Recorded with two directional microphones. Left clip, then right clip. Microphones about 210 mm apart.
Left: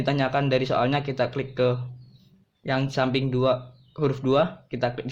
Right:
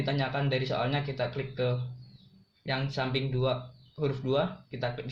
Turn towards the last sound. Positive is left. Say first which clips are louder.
# left 7 dB
turn(degrees=50)  # may be behind; listen again after turning